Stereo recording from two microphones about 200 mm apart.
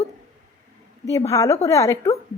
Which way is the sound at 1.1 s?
15° left (ahead or behind).